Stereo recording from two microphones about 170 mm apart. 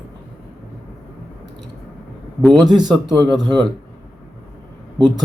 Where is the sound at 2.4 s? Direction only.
5° left (ahead or behind).